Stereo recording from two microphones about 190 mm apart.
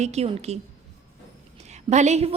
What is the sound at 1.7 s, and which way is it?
Speech, 35° right (ahead or behind).